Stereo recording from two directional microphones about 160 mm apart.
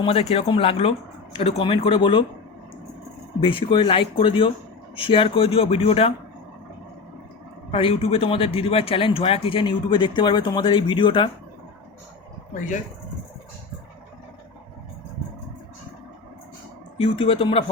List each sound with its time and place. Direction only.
0.0 s speech: 40° left (ahead or behind)
3.4 s speech: 30° left (ahead or behind)
7.7 s speech: 35° left (ahead or behind)
17.0 s speech: 35° left (ahead or behind)